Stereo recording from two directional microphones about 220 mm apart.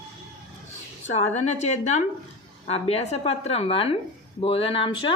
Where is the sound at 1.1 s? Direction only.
30° left (ahead or behind).